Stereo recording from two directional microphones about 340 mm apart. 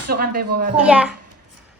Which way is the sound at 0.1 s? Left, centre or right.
Right.